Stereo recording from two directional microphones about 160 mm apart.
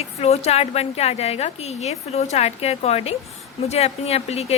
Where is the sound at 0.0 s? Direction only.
40° left (ahead or behind).